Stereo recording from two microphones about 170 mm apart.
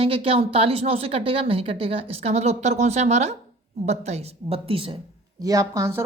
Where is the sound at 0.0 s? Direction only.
35° right (ahead or behind).